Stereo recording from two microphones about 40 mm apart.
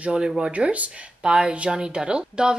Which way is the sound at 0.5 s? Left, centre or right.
Right.